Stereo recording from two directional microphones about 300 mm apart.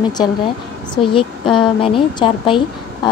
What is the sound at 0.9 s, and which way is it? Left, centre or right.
Speech, centre.